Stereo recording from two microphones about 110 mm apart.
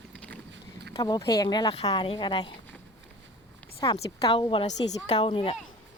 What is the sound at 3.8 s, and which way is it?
Speech, 40° left (ahead or behind).